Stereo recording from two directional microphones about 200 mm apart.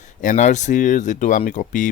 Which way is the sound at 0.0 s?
40° left (ahead or behind).